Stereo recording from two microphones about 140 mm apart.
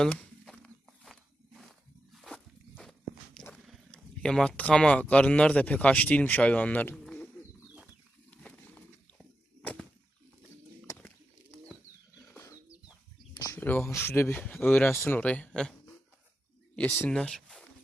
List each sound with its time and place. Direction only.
0.0 s walk: 5° left (ahead or behind)
3.7 s speech: 5° left (ahead or behind)
8.3 s a sound: 10° left (ahead or behind)
12.3 s bird: 20° left (ahead or behind)
13.3 s speech: 20° left (ahead or behind)
16.7 s speech: 15° left (ahead or behind)